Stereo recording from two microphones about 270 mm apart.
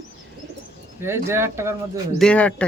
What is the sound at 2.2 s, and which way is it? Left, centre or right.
Speech, centre.